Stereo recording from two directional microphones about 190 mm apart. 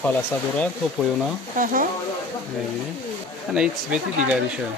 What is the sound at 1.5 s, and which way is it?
Speech, 45° right (ahead or behind).